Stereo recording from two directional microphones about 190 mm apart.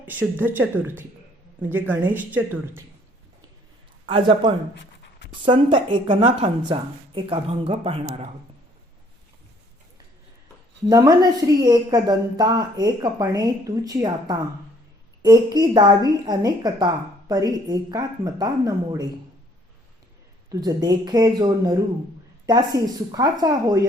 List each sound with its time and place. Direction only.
0.0 s speech: 10° right (ahead or behind)
4.0 s a woman's voice: 25° right (ahead or behind)
5.7 s a woman's voice: 25° right (ahead or behind)
10.8 s a woman's voice: 20° right (ahead or behind)
20.5 s a woman's voice: 20° right (ahead or behind)